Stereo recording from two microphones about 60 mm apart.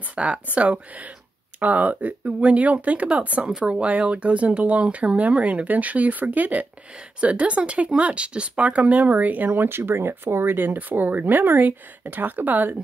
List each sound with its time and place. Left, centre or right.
0.1 s speech: centre
9.5 s speech: right